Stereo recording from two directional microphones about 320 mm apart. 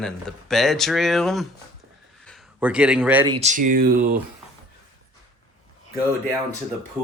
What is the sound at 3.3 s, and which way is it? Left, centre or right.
Speech, right.